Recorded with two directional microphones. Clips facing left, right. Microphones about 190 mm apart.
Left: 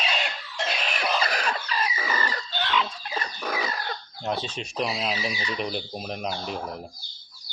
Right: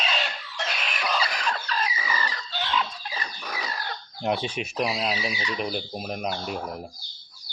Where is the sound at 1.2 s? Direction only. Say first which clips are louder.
Left 2 dB; 45° left (ahead or behind).